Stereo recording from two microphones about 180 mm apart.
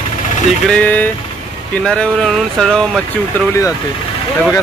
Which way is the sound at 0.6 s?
5° left (ahead or behind).